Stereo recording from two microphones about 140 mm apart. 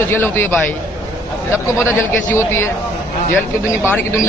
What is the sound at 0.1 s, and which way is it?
Speech, 15° left (ahead or behind).